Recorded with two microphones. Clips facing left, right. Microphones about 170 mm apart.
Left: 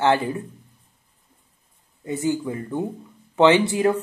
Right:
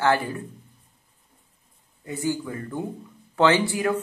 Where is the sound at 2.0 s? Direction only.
20° left (ahead or behind).